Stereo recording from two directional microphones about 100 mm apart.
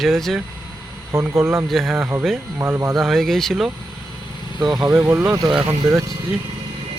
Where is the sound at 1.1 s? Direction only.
25° right (ahead or behind).